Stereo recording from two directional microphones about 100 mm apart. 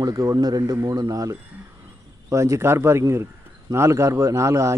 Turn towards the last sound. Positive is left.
turn(degrees=-30)  # may be behind; listen again after turning